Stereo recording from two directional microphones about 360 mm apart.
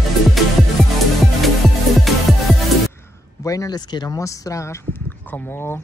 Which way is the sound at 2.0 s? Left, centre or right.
Centre.